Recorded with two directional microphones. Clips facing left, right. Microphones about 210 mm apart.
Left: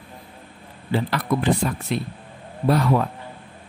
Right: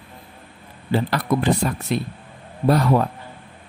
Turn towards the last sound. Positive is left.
turn(degrees=-40)  # may be behind; listen again after turning